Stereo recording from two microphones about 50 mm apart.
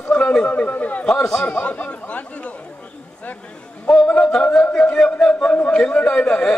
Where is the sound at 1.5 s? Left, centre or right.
Left.